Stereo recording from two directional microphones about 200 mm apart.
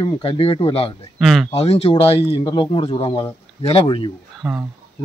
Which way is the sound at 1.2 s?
Centre (ahead or behind).